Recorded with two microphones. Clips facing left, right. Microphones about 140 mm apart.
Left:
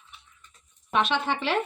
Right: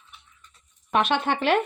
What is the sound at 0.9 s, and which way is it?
Speech, 55° right (ahead or behind).